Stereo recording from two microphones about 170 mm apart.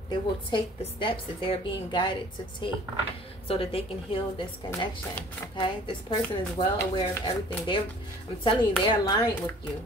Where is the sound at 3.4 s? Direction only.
35° left (ahead or behind).